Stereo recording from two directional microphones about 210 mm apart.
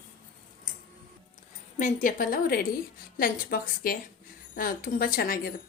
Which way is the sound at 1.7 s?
40° left (ahead or behind).